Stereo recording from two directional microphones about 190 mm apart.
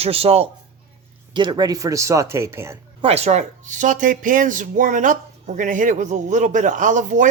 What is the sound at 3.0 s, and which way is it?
Speech, 35° right (ahead or behind).